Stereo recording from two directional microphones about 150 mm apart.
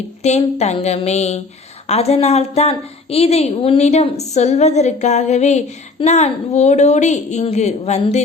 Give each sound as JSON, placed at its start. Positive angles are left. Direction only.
{"t": 0.2, "sound": "a woman's voice", "side_deg": 50}